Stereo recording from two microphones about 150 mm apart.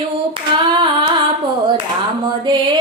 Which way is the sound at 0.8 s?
30° right (ahead or behind).